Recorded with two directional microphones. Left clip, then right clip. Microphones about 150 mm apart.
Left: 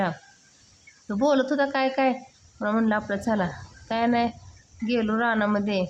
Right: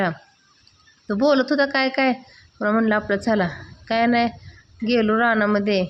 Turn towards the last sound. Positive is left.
turn(degrees=-15)  # may be behind; listen again after turning